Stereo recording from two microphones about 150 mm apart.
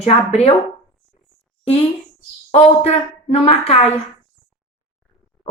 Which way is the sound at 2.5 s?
45° left (ahead or behind).